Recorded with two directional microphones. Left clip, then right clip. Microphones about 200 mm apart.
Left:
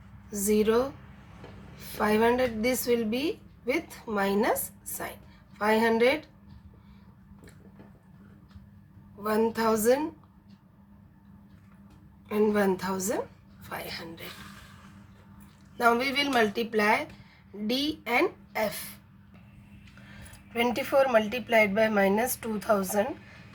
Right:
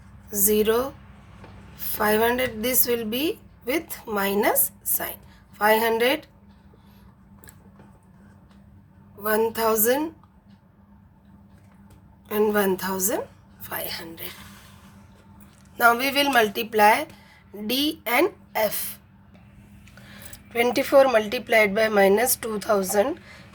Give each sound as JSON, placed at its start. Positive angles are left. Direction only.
{"t": 0.3, "sound": "a woman's voice", "side_deg": -35}
{"t": 5.5, "sound": "a woman's voice", "side_deg": -35}
{"t": 9.2, "sound": "a woman's voice", "side_deg": -30}
{"t": 12.3, "sound": "a woman's voice", "side_deg": -35}
{"t": 15.8, "sound": "a woman's voice", "side_deg": -35}
{"t": 20.5, "sound": "a woman's voice", "side_deg": -25}